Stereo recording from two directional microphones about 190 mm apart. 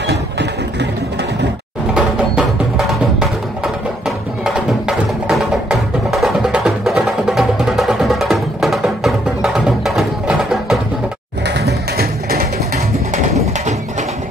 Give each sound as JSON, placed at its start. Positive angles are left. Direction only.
{"t": 0.0, "sound": "vehicle", "side_deg": -65}
{"t": 2.0, "sound": "music", "side_deg": -5}
{"t": 11.4, "sound": "music", "side_deg": -60}